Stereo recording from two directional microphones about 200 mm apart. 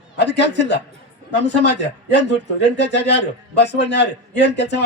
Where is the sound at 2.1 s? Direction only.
60° left (ahead or behind).